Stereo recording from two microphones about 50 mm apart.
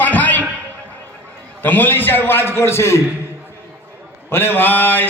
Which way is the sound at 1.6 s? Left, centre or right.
Left.